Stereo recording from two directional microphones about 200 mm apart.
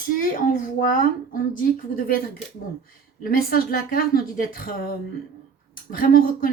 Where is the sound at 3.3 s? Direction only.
50° left (ahead or behind).